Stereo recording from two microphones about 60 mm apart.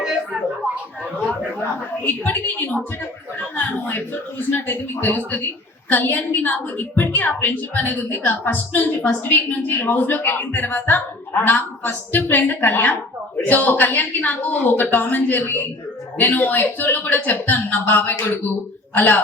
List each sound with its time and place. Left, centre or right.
2.0 s a woman's voice: left